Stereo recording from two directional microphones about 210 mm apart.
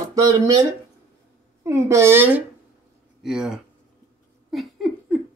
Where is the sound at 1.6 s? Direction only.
15° right (ahead or behind).